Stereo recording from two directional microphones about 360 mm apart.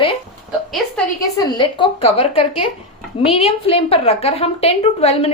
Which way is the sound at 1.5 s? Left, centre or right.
Centre.